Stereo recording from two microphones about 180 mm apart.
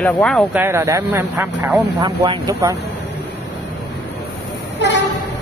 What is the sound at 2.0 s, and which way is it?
Speech, 25° right (ahead or behind).